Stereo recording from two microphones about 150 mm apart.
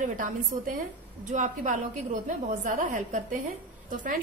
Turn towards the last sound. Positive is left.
turn(degrees=-60)  # may be behind; listen again after turning